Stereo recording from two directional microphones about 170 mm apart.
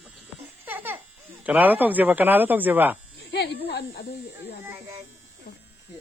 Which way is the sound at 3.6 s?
70° left (ahead or behind).